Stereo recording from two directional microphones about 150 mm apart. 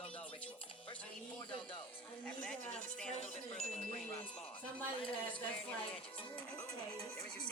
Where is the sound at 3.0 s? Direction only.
50° left (ahead or behind).